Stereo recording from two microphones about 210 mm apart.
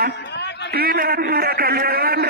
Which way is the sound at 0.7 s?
45° right (ahead or behind).